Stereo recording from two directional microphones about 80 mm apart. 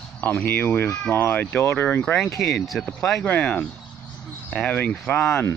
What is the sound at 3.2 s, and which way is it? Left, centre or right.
Speech, centre.